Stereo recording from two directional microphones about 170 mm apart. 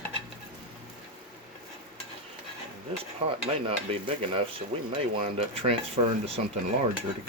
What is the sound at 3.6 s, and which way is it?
Cutlery, 30° right (ahead or behind).